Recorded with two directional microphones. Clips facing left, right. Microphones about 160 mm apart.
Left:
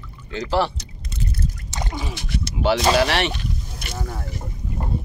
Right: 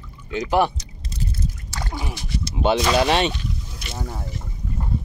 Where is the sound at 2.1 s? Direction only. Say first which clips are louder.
Left 1 dB; 70° left (ahead or behind).